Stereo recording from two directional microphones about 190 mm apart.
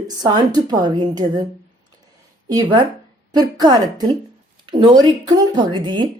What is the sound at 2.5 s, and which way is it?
A woman's voice, 20° right (ahead or behind).